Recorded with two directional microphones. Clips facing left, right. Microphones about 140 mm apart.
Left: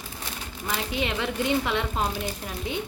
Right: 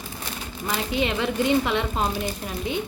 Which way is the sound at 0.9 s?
30° right (ahead or behind).